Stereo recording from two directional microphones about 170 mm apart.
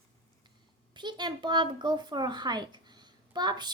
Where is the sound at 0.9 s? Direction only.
25° right (ahead or behind).